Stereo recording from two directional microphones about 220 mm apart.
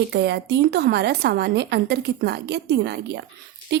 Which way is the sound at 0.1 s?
50° right (ahead or behind).